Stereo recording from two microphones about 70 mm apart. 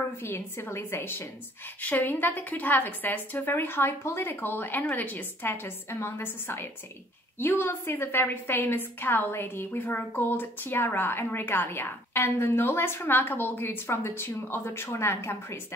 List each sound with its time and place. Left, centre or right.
0.2 s a woman's voice: left
1.8 s a woman's voice: left